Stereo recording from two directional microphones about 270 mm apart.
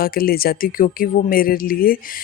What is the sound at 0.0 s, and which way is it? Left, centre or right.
Speech, left.